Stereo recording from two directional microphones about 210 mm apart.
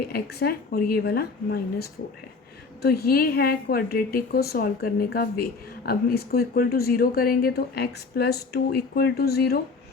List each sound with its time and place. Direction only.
0.1 s a woman's voice: 50° left (ahead or behind)